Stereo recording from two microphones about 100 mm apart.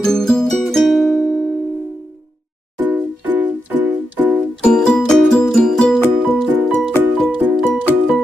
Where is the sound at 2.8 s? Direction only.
15° right (ahead or behind).